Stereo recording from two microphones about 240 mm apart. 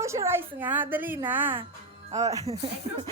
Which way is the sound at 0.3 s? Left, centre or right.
Centre.